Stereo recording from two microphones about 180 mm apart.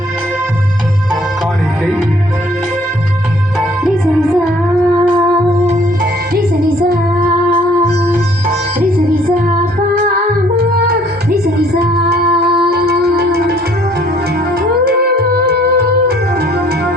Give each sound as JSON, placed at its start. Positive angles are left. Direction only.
{"t": 10.6, "sound": "music", "side_deg": -60}
{"t": 14.8, "sound": "music", "side_deg": -60}